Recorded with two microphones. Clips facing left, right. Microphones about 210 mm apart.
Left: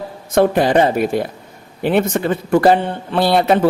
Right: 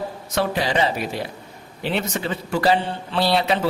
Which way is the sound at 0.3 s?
50° left (ahead or behind).